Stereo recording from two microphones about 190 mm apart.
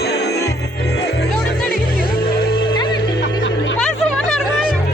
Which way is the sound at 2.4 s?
55° left (ahead or behind).